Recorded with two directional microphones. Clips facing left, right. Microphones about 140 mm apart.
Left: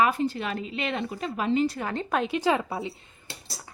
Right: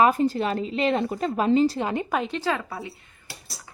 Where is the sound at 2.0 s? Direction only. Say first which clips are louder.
Even; centre (ahead or behind).